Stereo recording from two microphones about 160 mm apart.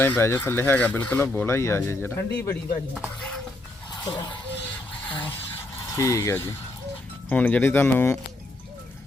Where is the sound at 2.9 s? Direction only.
5° right (ahead or behind).